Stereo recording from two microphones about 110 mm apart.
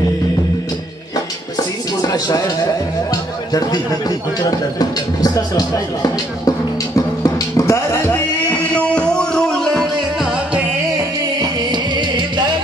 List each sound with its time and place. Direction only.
1.1 s dishes: 35° left (ahead or behind)
3.1 s music: 35° left (ahead or behind)
4.4 s speech: 35° left (ahead or behind)
7.0 s music: 30° left (ahead or behind); by 10.6 s 5° right (ahead or behind)
11.0 s music: 40° right (ahead or behind)